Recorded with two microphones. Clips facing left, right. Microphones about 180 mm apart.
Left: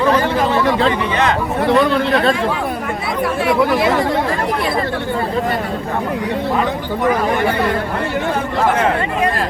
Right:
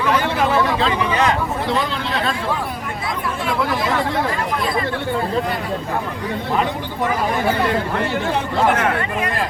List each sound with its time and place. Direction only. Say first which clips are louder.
1.6 s speech: left 8 dB; 60° left (ahead or behind)
3.4 s speech: left 6 dB; 70° left (ahead or behind)